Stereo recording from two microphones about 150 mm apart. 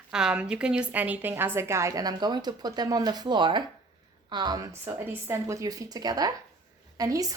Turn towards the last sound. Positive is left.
turn(degrees=-25)  # may be behind; listen again after turning